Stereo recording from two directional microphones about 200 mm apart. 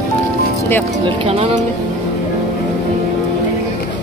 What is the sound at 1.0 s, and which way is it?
Speech, 30° right (ahead or behind).